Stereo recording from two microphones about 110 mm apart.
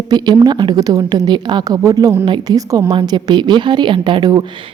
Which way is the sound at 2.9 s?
45° right (ahead or behind).